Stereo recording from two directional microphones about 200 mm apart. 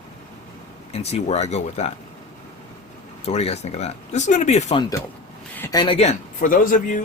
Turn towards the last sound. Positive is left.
turn(degrees=40)  # may be behind; listen again after turning